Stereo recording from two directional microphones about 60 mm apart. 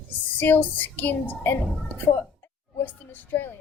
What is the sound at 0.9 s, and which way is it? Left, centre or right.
Speech, left.